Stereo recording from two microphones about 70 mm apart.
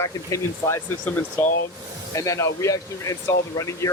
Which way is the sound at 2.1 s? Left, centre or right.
Left.